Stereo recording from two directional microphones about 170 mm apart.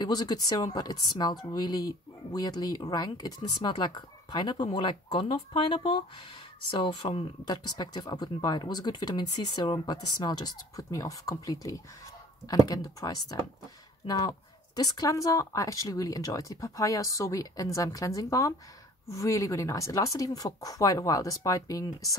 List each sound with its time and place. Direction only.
0.0 s speech: 25° left (ahead or behind)